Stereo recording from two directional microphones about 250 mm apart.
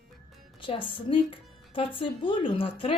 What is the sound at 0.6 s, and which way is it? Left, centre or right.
Speech, left.